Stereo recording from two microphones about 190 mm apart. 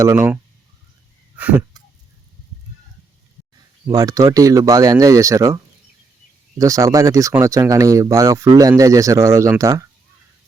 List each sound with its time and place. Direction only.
0.0 s speech: 15° right (ahead or behind)
1.4 s wheeze: 10° right (ahead or behind)
3.8 s speech: 20° right (ahead or behind)
6.6 s speech: 15° right (ahead or behind)